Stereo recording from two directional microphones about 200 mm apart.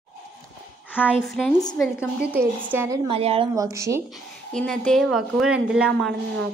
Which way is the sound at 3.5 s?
15° right (ahead or behind).